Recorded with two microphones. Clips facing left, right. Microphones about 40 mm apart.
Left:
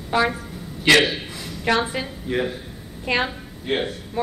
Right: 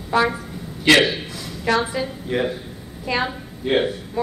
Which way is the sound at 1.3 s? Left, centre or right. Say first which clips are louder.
Right 1 dB; left.